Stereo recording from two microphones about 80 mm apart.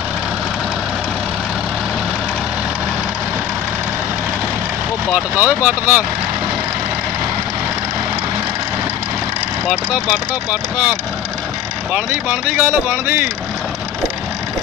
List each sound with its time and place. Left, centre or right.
5.1 s speech: centre
10.5 s speech: centre
12.1 s speech: right